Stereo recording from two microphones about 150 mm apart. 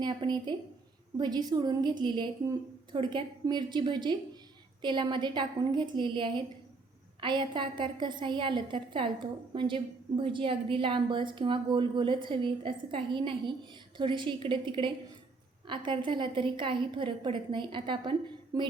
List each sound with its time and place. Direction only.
0.0 s a woman's voice: 30° right (ahead or behind)